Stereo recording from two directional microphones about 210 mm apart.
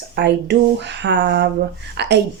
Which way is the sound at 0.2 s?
55° right (ahead or behind).